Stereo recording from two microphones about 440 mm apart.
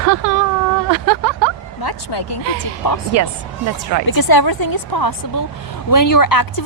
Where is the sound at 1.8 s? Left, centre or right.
Left.